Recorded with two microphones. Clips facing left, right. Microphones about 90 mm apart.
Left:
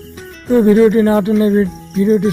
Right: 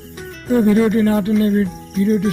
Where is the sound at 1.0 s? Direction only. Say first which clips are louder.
Left 4 dB; 85° left.